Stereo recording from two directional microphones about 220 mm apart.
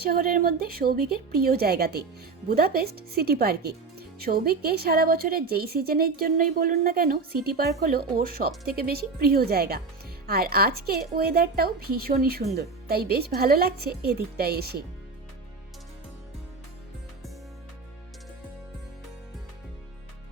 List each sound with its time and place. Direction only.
0.0 s speech: 40° right (ahead or behind)